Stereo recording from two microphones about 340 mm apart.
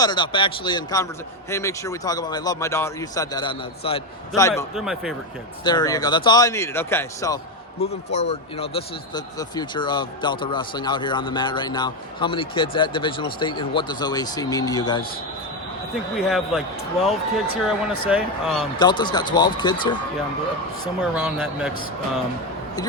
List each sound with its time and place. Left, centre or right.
0.0 s speech: centre
5.6 s speech: centre
16.1 s speech: centre
18.8 s speech: centre
21.0 s speech: centre